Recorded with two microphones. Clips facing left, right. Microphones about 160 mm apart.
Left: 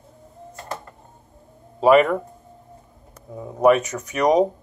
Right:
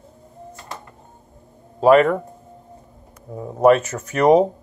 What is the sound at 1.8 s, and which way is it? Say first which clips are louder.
Speech: right 2 dB; 5° left (ahead or behind).